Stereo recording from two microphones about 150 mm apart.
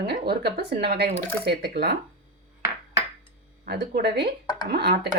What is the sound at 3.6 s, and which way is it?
Speech, 90° right.